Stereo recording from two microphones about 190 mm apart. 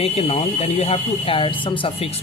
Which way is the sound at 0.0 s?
30° left (ahead or behind).